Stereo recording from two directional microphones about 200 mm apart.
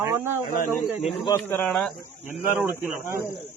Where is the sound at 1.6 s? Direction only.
Centre (ahead or behind).